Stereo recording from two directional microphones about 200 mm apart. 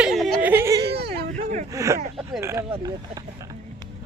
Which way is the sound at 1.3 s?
35° right (ahead or behind).